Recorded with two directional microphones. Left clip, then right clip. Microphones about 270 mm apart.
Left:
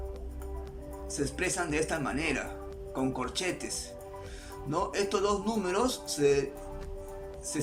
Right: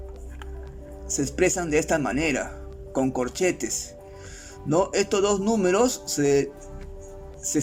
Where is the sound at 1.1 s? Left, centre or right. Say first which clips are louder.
Right 9 dB; right.